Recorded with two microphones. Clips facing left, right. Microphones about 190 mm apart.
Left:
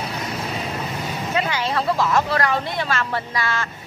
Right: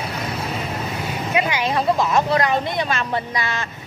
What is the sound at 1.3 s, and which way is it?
Speech, 15° right (ahead or behind).